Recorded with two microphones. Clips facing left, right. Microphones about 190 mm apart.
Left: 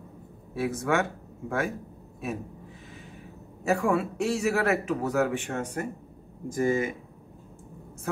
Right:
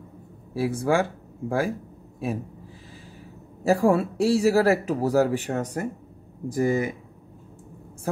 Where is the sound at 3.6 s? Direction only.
35° right (ahead or behind).